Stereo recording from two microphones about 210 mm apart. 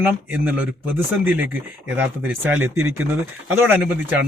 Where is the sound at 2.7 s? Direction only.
90° right.